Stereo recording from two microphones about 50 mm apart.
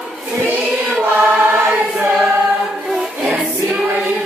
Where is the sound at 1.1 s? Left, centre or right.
Right.